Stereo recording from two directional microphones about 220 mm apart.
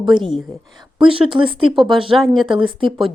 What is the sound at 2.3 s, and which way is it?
Speech, 20° right (ahead or behind).